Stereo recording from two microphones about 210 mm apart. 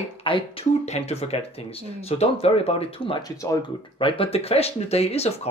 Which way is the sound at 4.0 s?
25° left (ahead or behind).